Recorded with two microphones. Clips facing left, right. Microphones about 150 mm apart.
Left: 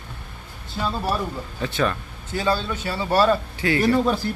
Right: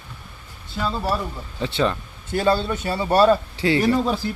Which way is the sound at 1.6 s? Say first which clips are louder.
Right 2 dB; 25° right (ahead or behind).